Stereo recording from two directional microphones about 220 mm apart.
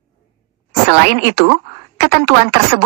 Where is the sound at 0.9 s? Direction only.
45° right (ahead or behind).